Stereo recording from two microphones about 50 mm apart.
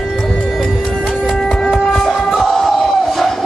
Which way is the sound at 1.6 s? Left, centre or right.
Centre.